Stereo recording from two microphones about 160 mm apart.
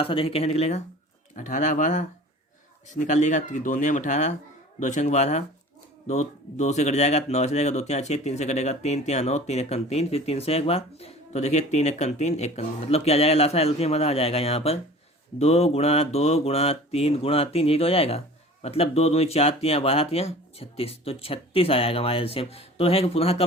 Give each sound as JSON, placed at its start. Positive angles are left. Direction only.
{"t": 0.0, "sound": "speech", "side_deg": 35}